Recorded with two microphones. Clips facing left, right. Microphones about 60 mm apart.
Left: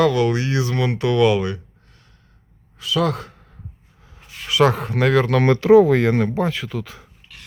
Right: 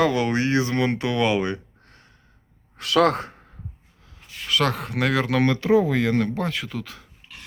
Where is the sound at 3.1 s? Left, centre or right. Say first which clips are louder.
Right 1 dB; right.